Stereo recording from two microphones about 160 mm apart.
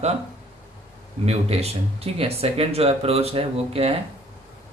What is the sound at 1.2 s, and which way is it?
Speech, 40° right (ahead or behind).